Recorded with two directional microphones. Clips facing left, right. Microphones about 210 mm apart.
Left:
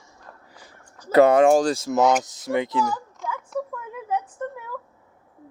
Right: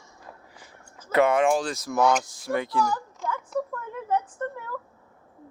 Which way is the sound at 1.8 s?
20° left (ahead or behind).